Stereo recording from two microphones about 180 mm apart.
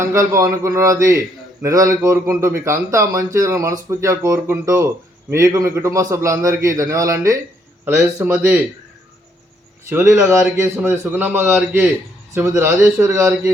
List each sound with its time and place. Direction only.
0.0 s speech: 15° right (ahead or behind)
9.9 s speech: 15° right (ahead or behind)